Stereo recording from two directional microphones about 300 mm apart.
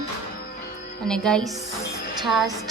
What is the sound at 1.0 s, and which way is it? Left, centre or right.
A woman's voice, centre.